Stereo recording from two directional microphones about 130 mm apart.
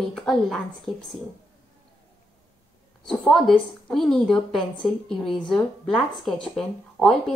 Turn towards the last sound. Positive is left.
turn(degrees=5)  # may be behind; listen again after turning